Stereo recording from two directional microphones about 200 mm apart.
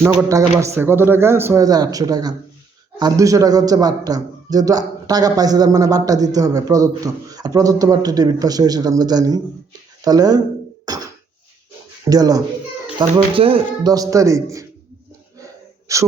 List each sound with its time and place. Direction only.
0.0 s a man's voice: 5° right (ahead or behind)
10.8 s a sound: 20° right (ahead or behind)
12.0 s a man's voice: 20° right (ahead or behind)
15.9 s a man's voice: 15° right (ahead or behind)